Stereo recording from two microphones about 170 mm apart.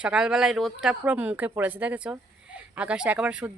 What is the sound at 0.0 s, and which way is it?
Speech, 5° right (ahead or behind).